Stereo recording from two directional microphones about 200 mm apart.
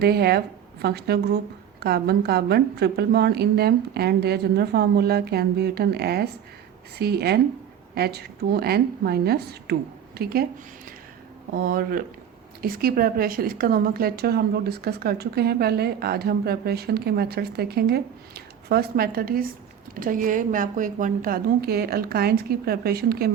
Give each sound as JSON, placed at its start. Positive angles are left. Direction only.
{"t": 0.0, "sound": "a woman's voice", "side_deg": -50}
{"t": 11.5, "sound": "a woman's voice", "side_deg": -45}